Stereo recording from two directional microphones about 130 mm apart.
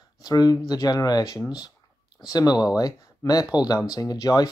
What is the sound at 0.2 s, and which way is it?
Speech, 30° left (ahead or behind).